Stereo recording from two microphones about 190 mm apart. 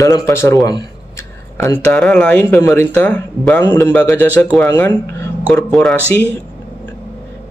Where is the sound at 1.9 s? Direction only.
5° left (ahead or behind).